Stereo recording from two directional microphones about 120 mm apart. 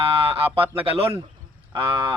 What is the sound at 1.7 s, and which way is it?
Speech, 45° right (ahead or behind).